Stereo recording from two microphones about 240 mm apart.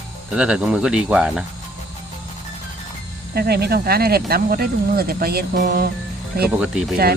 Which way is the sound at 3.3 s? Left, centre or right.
Right.